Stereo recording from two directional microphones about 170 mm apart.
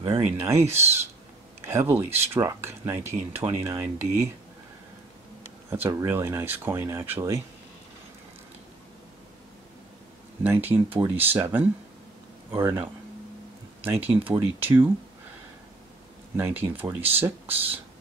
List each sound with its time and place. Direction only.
0.0 s speech: 15° right (ahead or behind)
5.7 s speech: 15° right (ahead or behind)
10.4 s speech: 10° right (ahead or behind)
13.8 s speech: 10° right (ahead or behind)
16.3 s speech: 10° right (ahead or behind)